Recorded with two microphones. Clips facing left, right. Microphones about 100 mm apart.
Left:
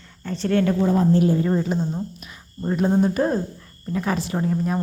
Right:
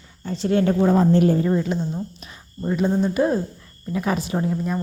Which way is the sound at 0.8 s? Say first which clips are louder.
Right 3 dB; 70° right (ahead or behind).